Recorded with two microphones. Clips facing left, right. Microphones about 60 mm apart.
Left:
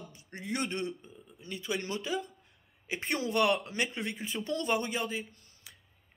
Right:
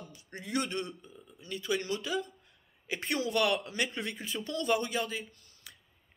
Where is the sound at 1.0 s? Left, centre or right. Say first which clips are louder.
Even; left.